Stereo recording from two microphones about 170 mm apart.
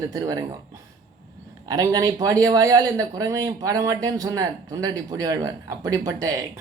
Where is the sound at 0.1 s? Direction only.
20° right (ahead or behind).